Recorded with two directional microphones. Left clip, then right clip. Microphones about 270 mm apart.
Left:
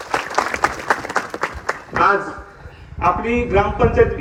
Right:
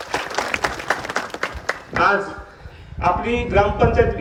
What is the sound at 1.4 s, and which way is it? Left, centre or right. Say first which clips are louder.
Applause: left 2 dB; centre.